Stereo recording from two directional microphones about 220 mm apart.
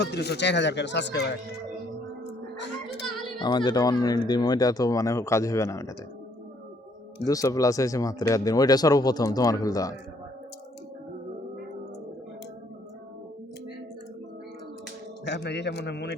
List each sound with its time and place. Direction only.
0.0 s speech: 50° left (ahead or behind)
3.1 s speech: 20° left (ahead or behind)
7.3 s speech: 15° left (ahead or behind)
15.2 s speech: 50° left (ahead or behind)